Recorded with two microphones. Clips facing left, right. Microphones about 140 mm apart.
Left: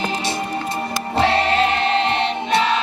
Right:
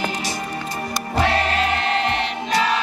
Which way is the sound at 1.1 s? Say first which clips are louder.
Left 3 dB; 25° left (ahead or behind).